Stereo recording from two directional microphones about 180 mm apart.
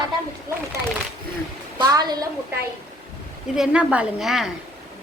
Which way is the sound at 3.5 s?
5° right (ahead or behind).